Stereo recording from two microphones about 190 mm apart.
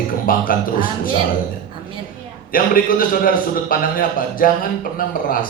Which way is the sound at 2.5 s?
50° left (ahead or behind).